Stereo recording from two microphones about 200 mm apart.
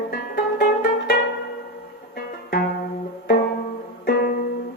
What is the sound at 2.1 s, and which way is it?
Music, 45° left (ahead or behind).